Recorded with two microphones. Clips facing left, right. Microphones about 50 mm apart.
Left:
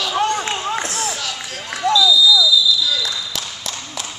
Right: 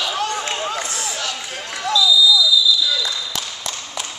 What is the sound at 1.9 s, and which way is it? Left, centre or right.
Basketball bounce, centre.